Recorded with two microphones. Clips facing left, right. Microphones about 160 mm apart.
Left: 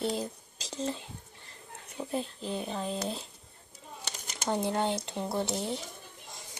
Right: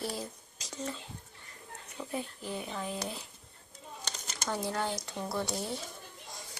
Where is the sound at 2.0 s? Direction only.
25° left (ahead or behind).